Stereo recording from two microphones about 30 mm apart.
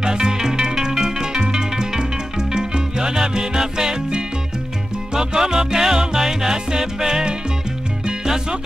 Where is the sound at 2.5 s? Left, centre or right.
Right.